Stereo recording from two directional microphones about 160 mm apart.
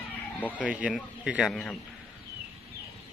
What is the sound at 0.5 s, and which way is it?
A man's voice, 5° right (ahead or behind).